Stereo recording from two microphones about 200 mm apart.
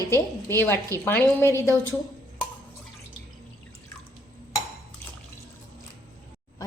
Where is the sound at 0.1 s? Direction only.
10° left (ahead or behind).